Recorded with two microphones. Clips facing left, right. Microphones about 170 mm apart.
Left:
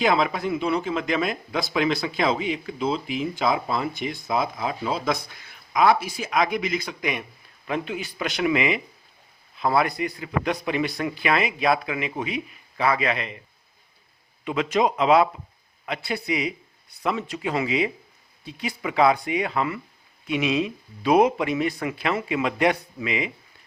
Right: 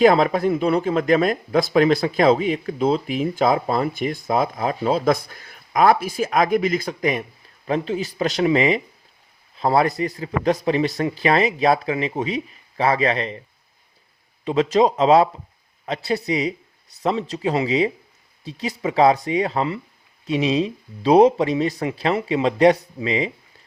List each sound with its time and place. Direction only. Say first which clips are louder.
0.0 s speech: right 7 dB; 45° right (ahead or behind)
14.4 s speech: right 5 dB; 35° right (ahead or behind)